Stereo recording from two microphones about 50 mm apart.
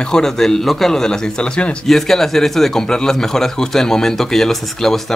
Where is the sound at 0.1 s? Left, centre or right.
Centre.